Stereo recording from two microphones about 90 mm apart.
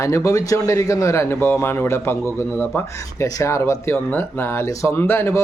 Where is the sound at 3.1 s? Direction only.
40° left (ahead or behind).